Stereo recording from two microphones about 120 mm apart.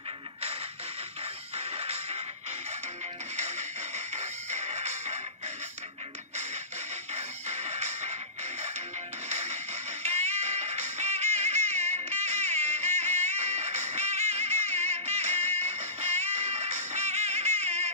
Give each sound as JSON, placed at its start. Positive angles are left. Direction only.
{"t": 1.6, "sound": "music", "side_deg": -55}
{"t": 3.3, "sound": "music", "side_deg": -70}
{"t": 7.2, "sound": "music", "side_deg": -65}
{"t": 9.3, "sound": "music", "side_deg": -65}